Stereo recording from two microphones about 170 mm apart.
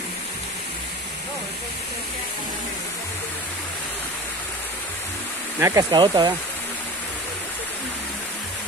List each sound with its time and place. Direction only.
5.6 s speech: 20° right (ahead or behind)